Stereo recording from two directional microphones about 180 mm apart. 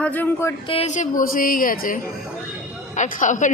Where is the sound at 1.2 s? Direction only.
50° left (ahead or behind).